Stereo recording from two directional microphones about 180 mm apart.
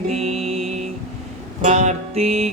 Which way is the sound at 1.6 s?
40° right (ahead or behind).